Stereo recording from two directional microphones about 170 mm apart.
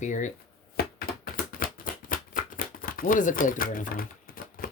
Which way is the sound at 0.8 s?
65° left (ahead or behind).